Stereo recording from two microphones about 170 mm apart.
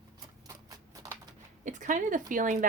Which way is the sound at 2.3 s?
50° right (ahead or behind).